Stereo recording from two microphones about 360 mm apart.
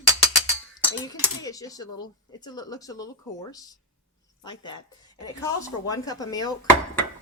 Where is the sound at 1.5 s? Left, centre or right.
Centre.